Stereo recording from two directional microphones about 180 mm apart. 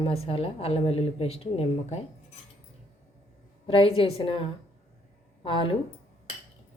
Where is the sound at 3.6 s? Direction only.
30° left (ahead or behind).